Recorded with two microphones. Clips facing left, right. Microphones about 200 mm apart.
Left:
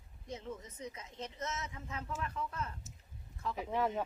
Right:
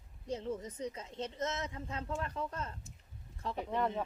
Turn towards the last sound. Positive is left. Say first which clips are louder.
# even
turn(degrees=5)  # may be behind; listen again after turning